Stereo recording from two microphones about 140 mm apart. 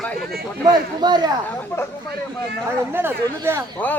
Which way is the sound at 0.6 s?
30° right (ahead or behind).